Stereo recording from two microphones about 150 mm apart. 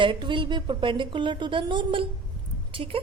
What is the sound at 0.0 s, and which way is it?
A woman's voice, 30° right (ahead or behind).